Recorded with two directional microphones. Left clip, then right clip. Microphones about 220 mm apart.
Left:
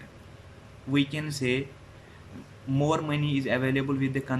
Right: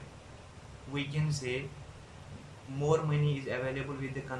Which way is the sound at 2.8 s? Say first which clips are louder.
Left 3 dB; 45° left (ahead or behind).